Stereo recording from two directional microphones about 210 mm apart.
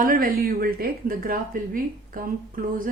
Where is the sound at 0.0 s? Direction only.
40° right (ahead or behind).